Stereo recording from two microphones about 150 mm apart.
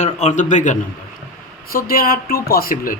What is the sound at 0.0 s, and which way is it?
Speech, 50° left (ahead or behind).